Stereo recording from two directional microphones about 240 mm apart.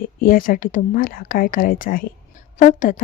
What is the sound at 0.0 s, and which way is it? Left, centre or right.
Speech, left.